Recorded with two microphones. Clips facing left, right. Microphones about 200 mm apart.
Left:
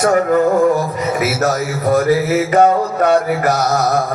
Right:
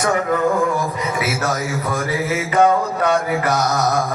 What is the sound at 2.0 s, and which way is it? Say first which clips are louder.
Mantra: left 7 dB; 45° left (ahead or behind).